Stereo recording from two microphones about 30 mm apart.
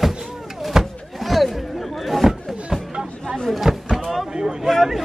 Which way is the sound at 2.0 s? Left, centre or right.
Centre.